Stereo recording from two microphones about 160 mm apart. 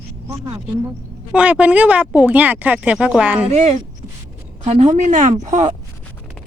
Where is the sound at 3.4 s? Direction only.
45° right (ahead or behind).